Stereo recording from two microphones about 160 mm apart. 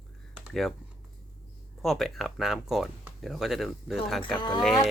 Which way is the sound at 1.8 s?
Centre (ahead or behind).